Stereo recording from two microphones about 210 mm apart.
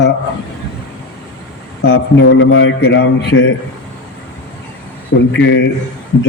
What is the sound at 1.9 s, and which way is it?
A man's voice, 70° left (ahead or behind).